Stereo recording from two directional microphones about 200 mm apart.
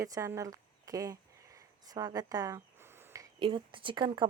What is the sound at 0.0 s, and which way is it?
A woman's voice, 15° right (ahead or behind).